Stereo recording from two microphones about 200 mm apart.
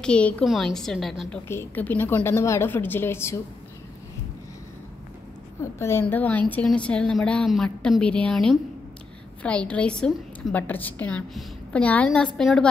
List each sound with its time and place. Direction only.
0.0 s a woman's voice: 5° left (ahead or behind)
5.6 s a woman's voice: 15° left (ahead or behind)